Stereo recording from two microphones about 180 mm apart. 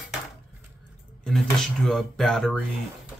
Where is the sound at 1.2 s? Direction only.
Centre (ahead or behind).